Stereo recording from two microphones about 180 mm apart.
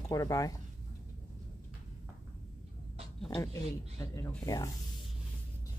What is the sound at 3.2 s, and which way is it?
Speech, 20° left (ahead or behind).